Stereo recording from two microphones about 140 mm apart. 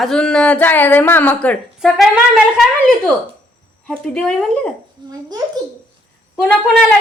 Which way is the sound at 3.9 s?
5° left (ahead or behind).